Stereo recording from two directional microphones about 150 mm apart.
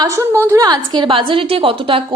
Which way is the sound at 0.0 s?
20° right (ahead or behind).